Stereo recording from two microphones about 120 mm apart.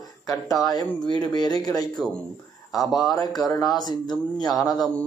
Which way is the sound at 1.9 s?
5° left (ahead or behind).